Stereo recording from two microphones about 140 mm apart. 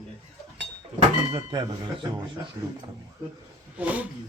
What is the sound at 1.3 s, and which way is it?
Speech, 35° right (ahead or behind).